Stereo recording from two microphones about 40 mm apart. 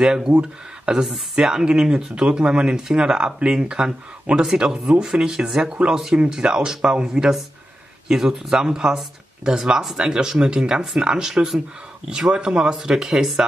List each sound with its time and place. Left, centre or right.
0.0 s speech: centre
1.3 s speech: centre
8.1 s speech: centre
12.8 s speech: centre